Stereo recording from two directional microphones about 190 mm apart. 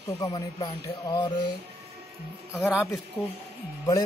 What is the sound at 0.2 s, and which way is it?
A man's voice, 20° left (ahead or behind).